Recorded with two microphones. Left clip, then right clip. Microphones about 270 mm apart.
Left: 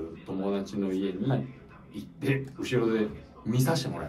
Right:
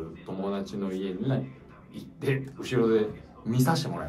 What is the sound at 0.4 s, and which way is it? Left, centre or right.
Speech, centre.